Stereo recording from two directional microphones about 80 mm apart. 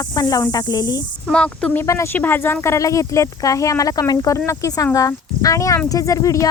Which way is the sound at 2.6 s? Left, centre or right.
Left.